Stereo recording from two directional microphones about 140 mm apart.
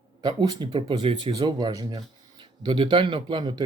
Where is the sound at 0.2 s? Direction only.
30° right (ahead or behind).